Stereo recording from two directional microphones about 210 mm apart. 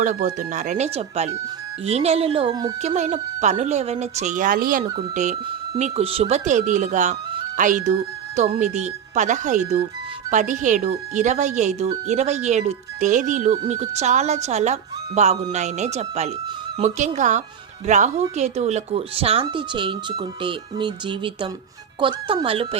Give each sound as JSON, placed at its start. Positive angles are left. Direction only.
{"t": 0.0, "sound": "speech", "side_deg": -35}
{"t": 2.8, "sound": "speech", "side_deg": -35}
{"t": 4.8, "sound": "speech", "side_deg": -30}